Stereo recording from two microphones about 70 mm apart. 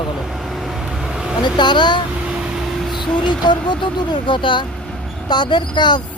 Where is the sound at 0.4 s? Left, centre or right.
Centre.